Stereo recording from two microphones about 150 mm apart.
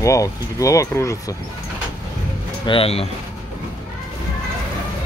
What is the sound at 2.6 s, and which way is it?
Speech, 35° left (ahead or behind).